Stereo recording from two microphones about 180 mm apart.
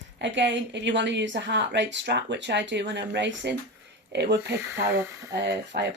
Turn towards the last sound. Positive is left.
turn(degrees=-70)  # may be behind; listen again after turning